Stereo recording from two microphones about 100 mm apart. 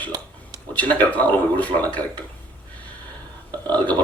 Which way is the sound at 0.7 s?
15° left (ahead or behind).